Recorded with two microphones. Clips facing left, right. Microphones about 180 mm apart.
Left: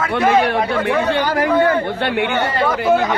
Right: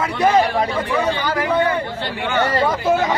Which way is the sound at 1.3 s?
40° left (ahead or behind).